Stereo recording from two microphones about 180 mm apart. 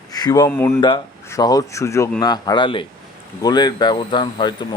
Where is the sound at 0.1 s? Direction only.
20° left (ahead or behind).